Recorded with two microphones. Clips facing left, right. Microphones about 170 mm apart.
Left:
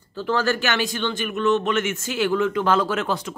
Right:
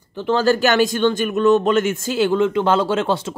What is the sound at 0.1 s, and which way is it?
Speech, 25° right (ahead or behind).